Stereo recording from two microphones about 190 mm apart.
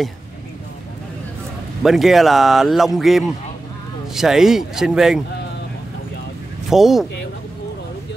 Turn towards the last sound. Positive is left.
turn(degrees=0)  # may be behind; listen again after turning